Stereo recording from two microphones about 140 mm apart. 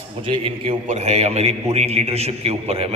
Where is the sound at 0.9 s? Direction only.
55° right (ahead or behind).